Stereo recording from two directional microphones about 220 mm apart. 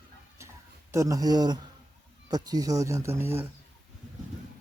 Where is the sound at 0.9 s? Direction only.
15° right (ahead or behind).